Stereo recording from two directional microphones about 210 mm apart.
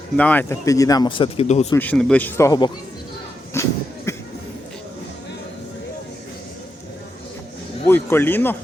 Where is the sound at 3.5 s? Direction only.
15° left (ahead or behind).